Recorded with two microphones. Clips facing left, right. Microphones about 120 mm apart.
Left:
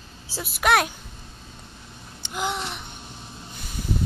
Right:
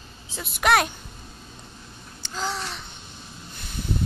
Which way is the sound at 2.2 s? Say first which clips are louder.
Left 2 dB; 20° left (ahead or behind).